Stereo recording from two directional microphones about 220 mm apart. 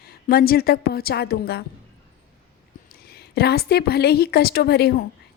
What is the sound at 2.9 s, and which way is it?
A woman's voice, 45° left (ahead or behind).